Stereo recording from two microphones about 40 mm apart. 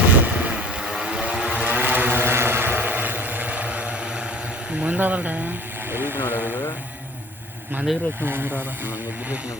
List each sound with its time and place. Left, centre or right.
0.1 s vehicle: right
1.5 s vehicle: right
2.2 s vehicle: right
4.7 s a sound: right
4.9 s speech: right
5.9 s vehicle: right
8.2 s speech: right